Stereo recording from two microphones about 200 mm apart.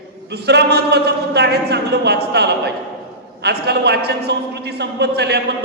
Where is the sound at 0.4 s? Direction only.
55° right (ahead or behind).